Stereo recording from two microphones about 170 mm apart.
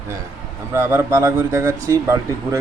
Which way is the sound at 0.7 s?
15° right (ahead or behind).